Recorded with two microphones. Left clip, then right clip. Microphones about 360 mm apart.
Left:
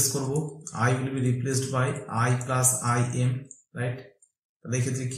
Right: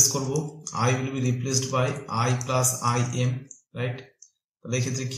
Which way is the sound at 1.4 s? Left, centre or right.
Centre.